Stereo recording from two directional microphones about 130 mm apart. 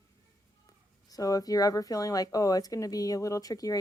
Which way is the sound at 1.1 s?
25° left (ahead or behind).